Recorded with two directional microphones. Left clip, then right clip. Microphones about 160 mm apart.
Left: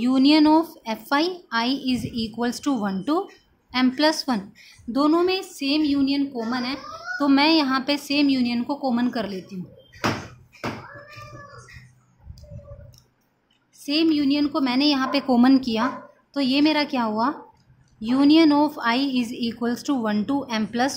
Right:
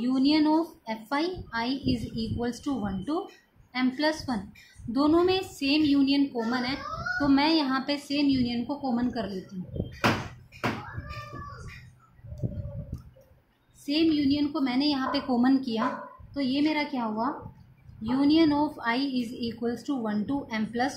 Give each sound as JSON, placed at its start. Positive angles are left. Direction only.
{"t": 0.0, "sound": "a woman's voice", "side_deg": 45}
{"t": 4.9, "sound": "a woman's voice", "side_deg": 35}
{"t": 7.2, "sound": "a woman's voice", "side_deg": 40}
{"t": 13.8, "sound": "a woman's voice", "side_deg": 40}